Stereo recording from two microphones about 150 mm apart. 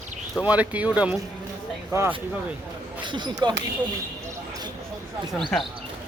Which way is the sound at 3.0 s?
30° right (ahead or behind).